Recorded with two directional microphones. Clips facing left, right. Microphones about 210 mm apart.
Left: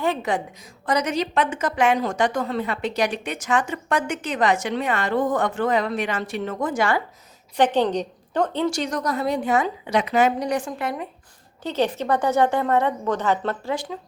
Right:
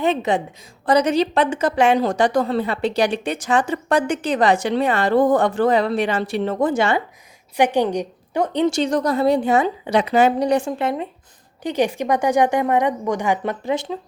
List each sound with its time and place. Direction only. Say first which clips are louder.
0.0 s a woman's voice: right 4 dB; 20° right (ahead or behind)
7.5 s a woman's voice: right 2 dB; 10° right (ahead or behind)
11.6 s a woman's voice: right 3 dB; 15° right (ahead or behind)